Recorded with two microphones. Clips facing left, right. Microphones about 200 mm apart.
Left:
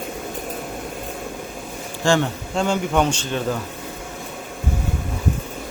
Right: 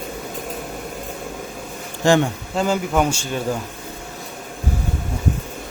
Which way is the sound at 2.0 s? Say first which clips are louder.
Right 3 dB; 20° right (ahead or behind).